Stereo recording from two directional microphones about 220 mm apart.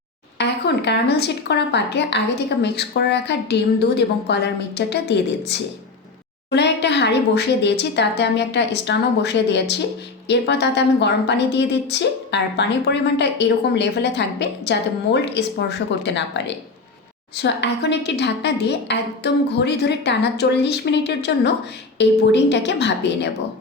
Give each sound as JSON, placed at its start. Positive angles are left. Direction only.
{"t": 0.3, "sound": "a woman's voice", "side_deg": 50}